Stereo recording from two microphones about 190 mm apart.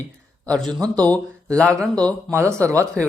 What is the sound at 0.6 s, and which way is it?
Speech, 20° right (ahead or behind).